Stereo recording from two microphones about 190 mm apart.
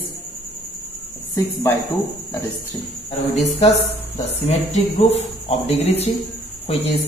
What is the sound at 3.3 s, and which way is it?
Speech, 35° left (ahead or behind).